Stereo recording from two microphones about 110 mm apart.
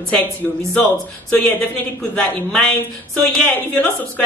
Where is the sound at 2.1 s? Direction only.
15° left (ahead or behind).